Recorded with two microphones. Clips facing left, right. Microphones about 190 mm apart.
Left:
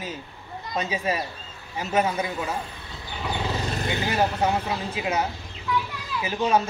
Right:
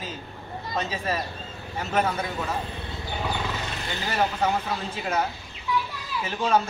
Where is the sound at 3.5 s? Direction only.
35° left (ahead or behind).